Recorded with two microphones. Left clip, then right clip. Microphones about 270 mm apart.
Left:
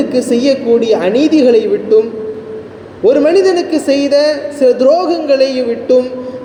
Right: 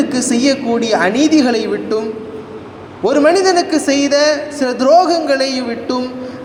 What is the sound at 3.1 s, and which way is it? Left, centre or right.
A woman's voice, centre.